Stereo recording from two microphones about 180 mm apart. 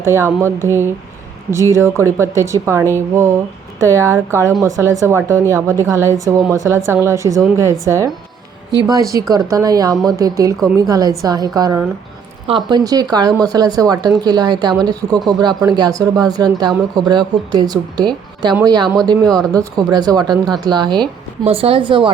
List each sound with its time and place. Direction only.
0.0 s a woman's voice: 15° right (ahead or behind)
1.7 s a woman's voice: 15° right (ahead or behind)
19.2 s speech: 5° left (ahead or behind)
19.5 s speech: 20° right (ahead or behind)